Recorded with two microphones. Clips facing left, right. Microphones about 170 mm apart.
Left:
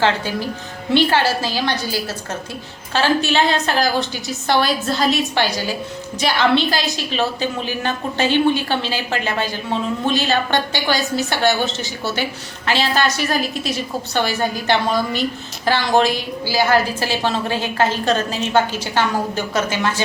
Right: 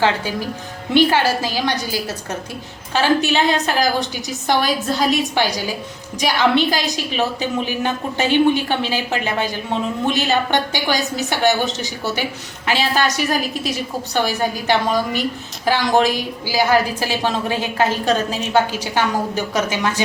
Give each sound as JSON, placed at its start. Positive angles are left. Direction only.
{"t": 0.9, "sound": "a woman's voice", "side_deg": -15}